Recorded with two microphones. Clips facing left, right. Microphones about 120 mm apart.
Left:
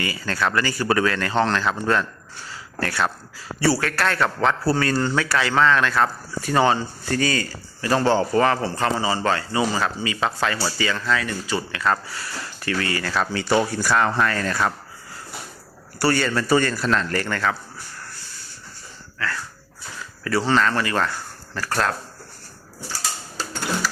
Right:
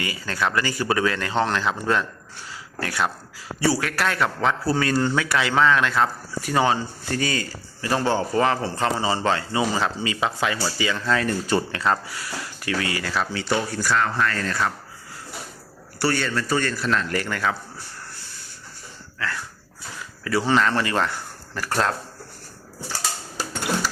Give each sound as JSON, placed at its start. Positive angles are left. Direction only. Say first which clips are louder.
{"t": 0.0, "sound": "a man's voice", "louder": "left 1 dB", "side_deg": -15}
{"t": 11.1, "sound": "speech", "louder": "right 2 dB", "side_deg": -40}
{"t": 11.9, "sound": "a man's voice", "louder": "left 3 dB", "side_deg": -15}
{"t": 13.7, "sound": "speech", "louder": "left 2 dB", "side_deg": 15}
{"t": 16.0, "sound": "a man's voice", "louder": "left 3 dB", "side_deg": 0}
{"t": 20.2, "sound": "speech", "louder": "even", "side_deg": -10}